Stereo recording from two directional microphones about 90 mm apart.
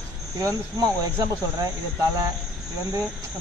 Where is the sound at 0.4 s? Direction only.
40° right (ahead or behind).